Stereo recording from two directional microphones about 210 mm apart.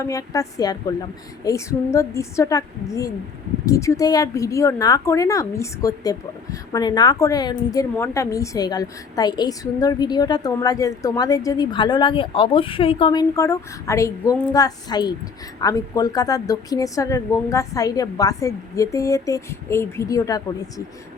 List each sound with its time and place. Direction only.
0.0 s speech: 15° left (ahead or behind)